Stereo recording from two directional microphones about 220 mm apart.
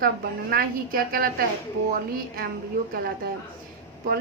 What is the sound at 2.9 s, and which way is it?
Speech, 45° right (ahead or behind).